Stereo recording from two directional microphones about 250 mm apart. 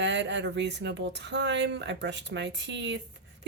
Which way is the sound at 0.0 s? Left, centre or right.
Right.